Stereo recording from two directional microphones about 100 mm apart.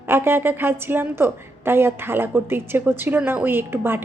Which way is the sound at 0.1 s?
25° right (ahead or behind).